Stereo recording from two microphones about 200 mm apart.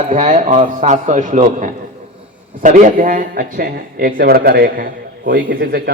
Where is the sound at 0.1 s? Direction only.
35° right (ahead or behind).